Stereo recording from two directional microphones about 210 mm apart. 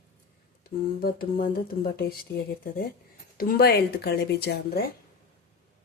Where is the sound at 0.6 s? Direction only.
45° left (ahead or behind).